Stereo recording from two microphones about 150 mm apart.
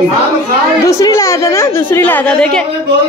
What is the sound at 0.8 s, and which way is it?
A woman's voice, 20° left (ahead or behind).